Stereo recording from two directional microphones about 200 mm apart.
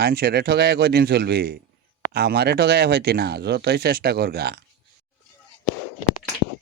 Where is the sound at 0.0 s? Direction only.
50° right (ahead or behind).